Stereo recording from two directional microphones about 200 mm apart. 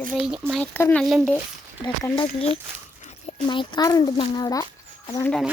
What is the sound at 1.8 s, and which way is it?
A child's voice, 25° left (ahead or behind).